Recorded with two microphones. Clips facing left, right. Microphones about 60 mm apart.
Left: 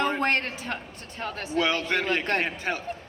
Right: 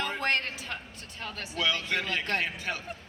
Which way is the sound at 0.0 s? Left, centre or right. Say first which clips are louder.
Left 5 dB; left.